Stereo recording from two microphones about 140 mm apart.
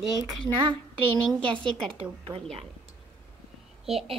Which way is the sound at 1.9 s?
40° right (ahead or behind).